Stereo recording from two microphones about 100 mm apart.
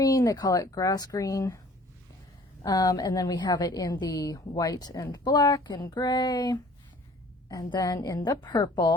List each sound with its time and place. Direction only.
0.0 s a woman's voice: 35° left (ahead or behind)